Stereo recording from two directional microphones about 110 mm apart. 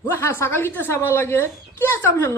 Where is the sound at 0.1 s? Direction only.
20° left (ahead or behind).